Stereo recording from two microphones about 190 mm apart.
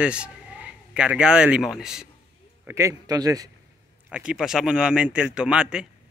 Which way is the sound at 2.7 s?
15° right (ahead or behind).